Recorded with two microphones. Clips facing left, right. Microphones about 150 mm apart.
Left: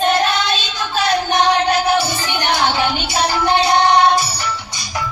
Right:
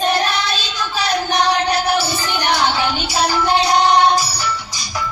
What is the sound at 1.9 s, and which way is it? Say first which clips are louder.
Music: left 2 dB; 20° left (ahead or behind).